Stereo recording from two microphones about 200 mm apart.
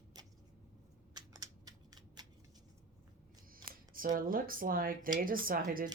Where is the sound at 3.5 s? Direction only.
45° right (ahead or behind).